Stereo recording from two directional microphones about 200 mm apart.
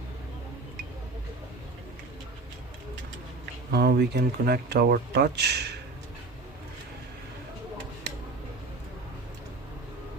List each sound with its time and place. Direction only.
3.7 s speech: 50° right (ahead or behind)